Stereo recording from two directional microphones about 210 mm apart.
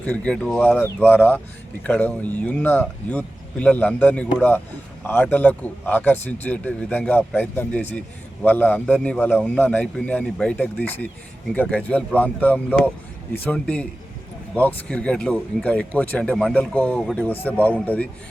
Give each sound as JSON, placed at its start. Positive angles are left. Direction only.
{"t": 0.0, "sound": "a man's voice", "side_deg": 5}